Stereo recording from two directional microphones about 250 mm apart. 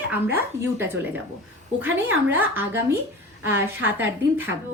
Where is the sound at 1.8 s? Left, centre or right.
Right.